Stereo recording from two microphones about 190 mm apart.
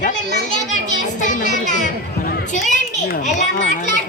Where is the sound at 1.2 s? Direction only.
40° left (ahead or behind).